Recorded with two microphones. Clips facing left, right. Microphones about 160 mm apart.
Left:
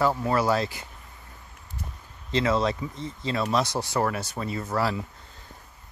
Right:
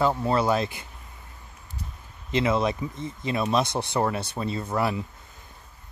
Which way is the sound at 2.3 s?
20° right (ahead or behind).